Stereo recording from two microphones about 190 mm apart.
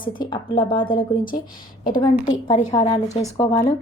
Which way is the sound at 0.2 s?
25° left (ahead or behind).